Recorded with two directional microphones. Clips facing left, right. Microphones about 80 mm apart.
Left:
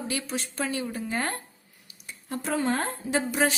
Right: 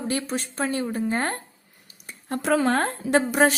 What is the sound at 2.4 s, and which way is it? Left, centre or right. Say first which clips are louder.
A woman's voice: right 6 dB; right.